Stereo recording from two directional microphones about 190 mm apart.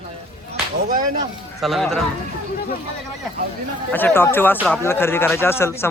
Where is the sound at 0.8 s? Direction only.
45° right (ahead or behind).